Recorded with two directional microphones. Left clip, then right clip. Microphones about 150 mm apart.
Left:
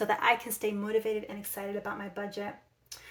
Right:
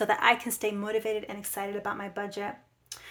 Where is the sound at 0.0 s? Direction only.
25° right (ahead or behind).